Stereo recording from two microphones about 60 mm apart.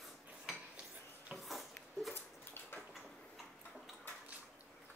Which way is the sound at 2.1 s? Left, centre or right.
Left.